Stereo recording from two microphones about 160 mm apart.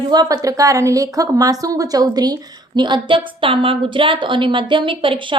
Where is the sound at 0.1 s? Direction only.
25° right (ahead or behind).